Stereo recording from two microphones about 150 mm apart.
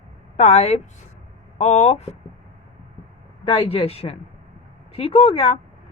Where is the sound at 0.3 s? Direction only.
45° left (ahead or behind).